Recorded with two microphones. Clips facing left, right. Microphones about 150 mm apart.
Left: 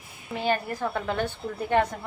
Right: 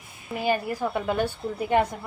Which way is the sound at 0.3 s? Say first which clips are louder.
Right 1 dB; 10° right (ahead or behind).